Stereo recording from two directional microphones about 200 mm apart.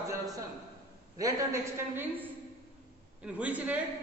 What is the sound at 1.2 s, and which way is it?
A woman's voice, 15° right (ahead or behind).